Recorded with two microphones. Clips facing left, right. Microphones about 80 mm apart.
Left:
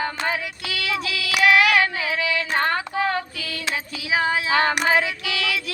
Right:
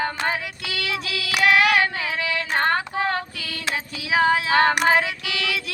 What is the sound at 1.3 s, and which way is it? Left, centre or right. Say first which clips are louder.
Child singing: left 1 dB; right.